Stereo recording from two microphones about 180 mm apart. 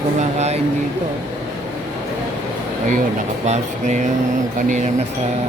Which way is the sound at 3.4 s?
45° right (ahead or behind).